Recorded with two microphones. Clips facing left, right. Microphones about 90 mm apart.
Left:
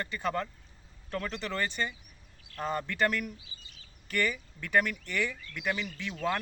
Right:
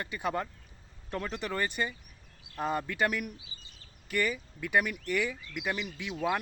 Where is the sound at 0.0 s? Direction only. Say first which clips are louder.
Left 1 dB; 15° right (ahead or behind).